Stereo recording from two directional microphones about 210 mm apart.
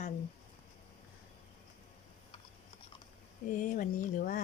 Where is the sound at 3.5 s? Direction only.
40° left (ahead or behind).